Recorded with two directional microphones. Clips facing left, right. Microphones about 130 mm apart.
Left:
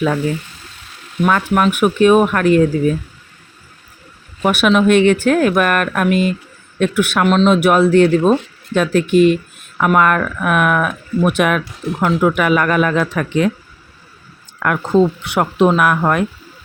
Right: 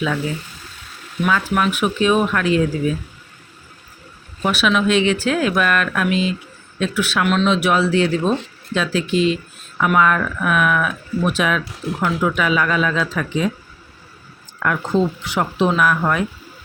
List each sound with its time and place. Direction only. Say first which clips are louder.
1.2 s speech: left 4 dB; 50° left (ahead or behind)
4.4 s speech: left 5 dB; 50° left (ahead or behind)
7.3 s speech: left 5 dB; 40° left (ahead or behind)
7.5 s speech: left 6 dB; 50° left (ahead or behind)
14.6 s speech: left 5 dB; 60° left (ahead or behind)